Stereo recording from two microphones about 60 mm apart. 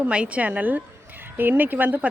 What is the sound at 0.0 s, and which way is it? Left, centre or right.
A woman's voice, right.